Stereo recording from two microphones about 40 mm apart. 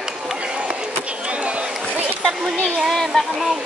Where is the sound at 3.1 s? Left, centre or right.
Left.